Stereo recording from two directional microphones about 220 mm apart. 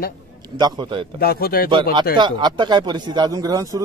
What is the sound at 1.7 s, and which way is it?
Speech, 20° right (ahead or behind).